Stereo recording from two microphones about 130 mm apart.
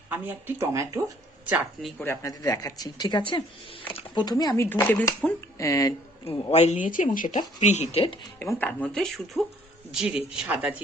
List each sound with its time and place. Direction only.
0.1 s speech: 15° right (ahead or behind)
2.0 s speech: 25° left (ahead or behind)
5.5 s speech: 25° left (ahead or behind)
6.2 s speech: 55° left (ahead or behind)
8.4 s speech: 20° left (ahead or behind); by 10.8 s 10° right (ahead or behind)